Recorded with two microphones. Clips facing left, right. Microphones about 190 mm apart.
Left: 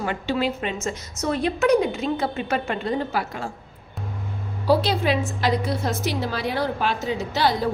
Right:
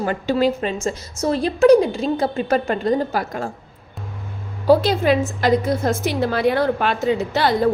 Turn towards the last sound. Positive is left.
turn(degrees=-55)  # may be behind; listen again after turning